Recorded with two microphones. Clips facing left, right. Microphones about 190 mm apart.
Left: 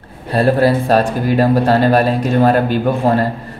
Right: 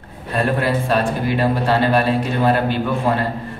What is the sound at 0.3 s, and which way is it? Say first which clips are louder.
Speech: left 6 dB; 35° left (ahead or behind).